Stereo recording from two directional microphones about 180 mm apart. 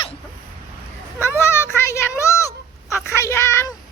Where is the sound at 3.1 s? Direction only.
15° left (ahead or behind).